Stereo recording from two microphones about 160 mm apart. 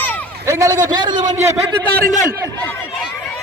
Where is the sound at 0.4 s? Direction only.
20° right (ahead or behind).